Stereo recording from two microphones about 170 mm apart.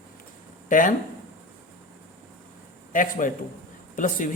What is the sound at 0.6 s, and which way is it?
Speech, 50° left (ahead or behind).